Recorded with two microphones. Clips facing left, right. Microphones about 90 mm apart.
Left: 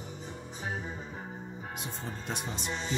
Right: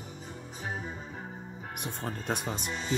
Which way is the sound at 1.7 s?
55° right (ahead or behind).